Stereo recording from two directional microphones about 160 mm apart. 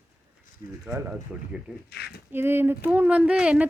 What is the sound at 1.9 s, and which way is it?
Speech, 90° left.